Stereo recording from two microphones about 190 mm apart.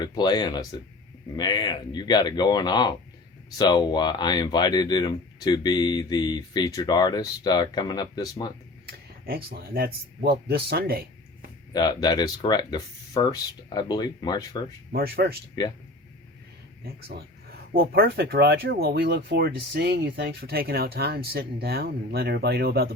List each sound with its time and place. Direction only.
0.0 s speech: 20° left (ahead or behind)
8.9 s speech: 50° right (ahead or behind)
11.7 s speech: 20° left (ahead or behind)
14.9 s speech: 55° right (ahead or behind)
16.8 s speech: 50° right (ahead or behind)